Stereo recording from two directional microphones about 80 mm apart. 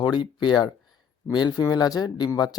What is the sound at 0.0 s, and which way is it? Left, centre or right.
Speech, left.